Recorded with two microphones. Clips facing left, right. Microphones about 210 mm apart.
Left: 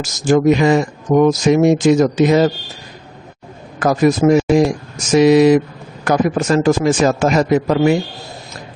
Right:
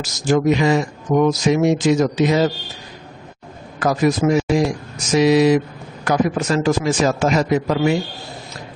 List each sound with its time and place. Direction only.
0.0 s speech: 50° left (ahead or behind)
3.8 s speech: 50° left (ahead or behind)